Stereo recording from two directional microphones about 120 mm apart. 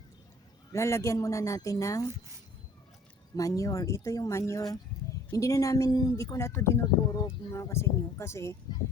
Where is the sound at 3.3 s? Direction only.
30° left (ahead or behind).